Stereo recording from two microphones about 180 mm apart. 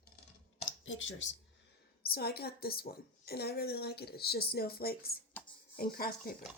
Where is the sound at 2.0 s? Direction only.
60° left (ahead or behind).